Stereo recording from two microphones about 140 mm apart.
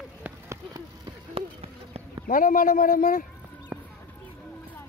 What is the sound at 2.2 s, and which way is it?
Speech, 75° left (ahead or behind).